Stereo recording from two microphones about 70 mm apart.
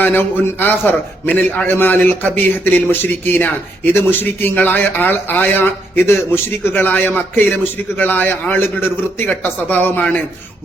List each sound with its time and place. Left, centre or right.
0.0 s a man's voice: left